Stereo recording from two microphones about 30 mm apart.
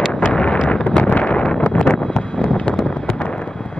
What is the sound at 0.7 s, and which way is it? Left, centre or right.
Wind noise, left.